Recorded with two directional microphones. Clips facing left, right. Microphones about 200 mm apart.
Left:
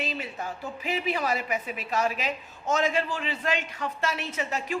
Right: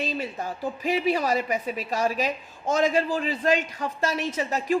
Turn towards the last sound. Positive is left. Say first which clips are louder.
# right 6 dB
turn(degrees=-35)  # may be behind; listen again after turning